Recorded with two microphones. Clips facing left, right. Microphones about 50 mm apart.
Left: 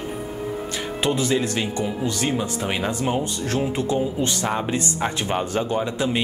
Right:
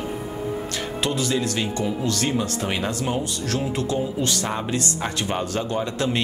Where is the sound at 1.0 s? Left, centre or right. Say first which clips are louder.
Left 3 dB; centre.